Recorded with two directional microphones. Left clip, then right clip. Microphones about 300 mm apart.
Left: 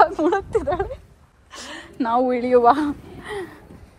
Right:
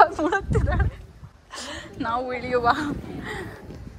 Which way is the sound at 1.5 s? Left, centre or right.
Centre.